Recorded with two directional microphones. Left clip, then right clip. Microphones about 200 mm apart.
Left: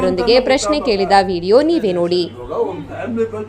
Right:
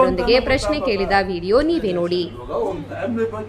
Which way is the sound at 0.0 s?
15° left (ahead or behind).